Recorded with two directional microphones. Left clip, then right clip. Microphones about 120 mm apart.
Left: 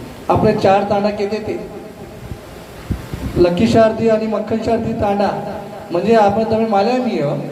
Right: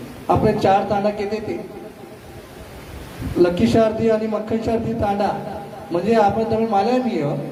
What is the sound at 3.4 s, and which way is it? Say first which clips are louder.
A man's voice: left 4 dB; 25° right (ahead or behind).